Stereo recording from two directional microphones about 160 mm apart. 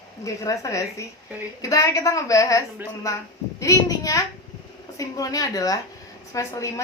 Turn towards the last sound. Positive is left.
turn(degrees=20)  # may be behind; listen again after turning